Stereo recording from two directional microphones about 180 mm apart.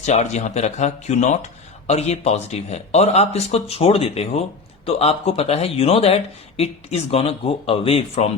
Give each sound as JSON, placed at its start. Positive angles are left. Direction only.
{"t": 0.0, "sound": "speech", "side_deg": 40}